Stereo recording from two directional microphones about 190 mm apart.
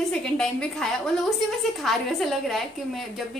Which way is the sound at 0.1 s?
5° left (ahead or behind).